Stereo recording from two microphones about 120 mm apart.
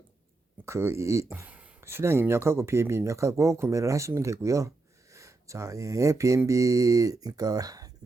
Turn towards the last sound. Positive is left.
turn(degrees=-30)  # may be behind; listen again after turning